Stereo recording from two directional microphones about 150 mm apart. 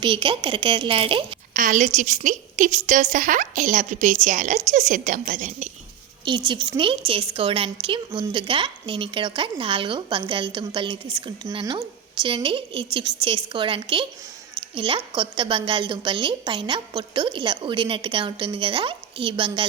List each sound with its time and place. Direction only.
0.0 s speech: 35° right (ahead or behind)
1.5 s a woman's voice: 60° right (ahead or behind)
6.2 s speech: 30° right (ahead or behind)